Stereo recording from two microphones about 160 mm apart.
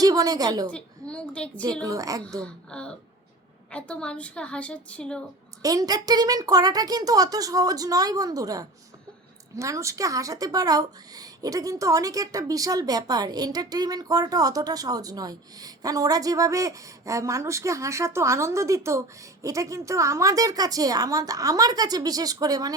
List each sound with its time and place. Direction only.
0.0 s a woman's voice: 25° right (ahead or behind)
0.7 s a woman's voice: 5° left (ahead or behind)
1.8 s a woman's voice: 20° right (ahead or behind)
2.4 s a woman's voice: 5° left (ahead or behind)
5.6 s a woman's voice: 25° right (ahead or behind)